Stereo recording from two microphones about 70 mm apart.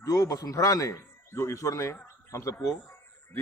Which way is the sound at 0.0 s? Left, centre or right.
Left.